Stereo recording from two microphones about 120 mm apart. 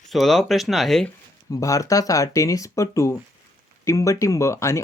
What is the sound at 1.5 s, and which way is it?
Speech, 25° left (ahead or behind).